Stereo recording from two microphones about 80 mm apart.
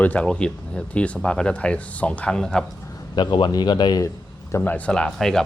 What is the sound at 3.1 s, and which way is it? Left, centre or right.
Speech, left.